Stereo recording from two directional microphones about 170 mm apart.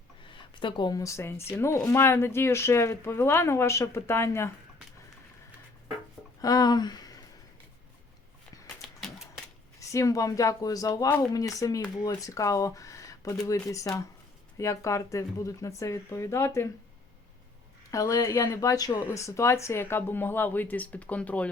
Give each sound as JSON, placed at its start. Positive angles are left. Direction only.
{"t": 0.3, "sound": "a woman's voice", "side_deg": 30}
{"t": 6.4, "sound": "a sound", "side_deg": 20}
{"t": 8.8, "sound": "typewriter", "side_deg": 0}
{"t": 9.8, "sound": "a woman's voice", "side_deg": 20}
{"t": 17.9, "sound": "a woman's voice", "side_deg": 20}